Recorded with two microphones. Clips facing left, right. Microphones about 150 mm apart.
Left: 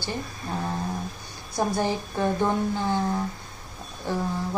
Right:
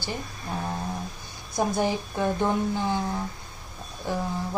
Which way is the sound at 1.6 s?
15° right (ahead or behind).